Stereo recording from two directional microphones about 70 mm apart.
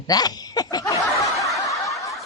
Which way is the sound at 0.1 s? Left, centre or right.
Left.